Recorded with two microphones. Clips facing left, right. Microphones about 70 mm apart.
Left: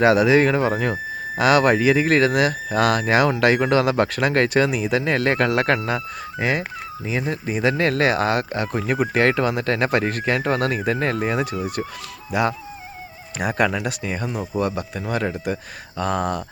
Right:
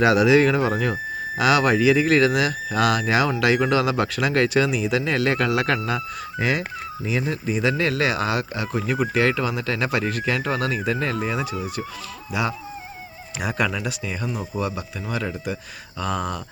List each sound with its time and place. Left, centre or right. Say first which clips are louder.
0.0 s speech: left 1 dB; left
7.4 s speech: left 3 dB; left